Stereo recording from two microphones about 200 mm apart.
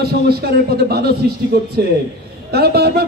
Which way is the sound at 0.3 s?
50° right (ahead or behind).